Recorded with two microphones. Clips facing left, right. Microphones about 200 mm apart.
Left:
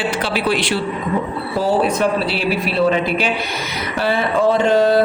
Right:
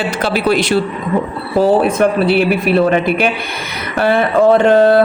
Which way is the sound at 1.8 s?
55° right (ahead or behind).